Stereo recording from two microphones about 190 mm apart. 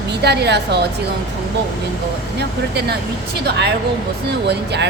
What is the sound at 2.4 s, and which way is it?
Speech, 60° right (ahead or behind).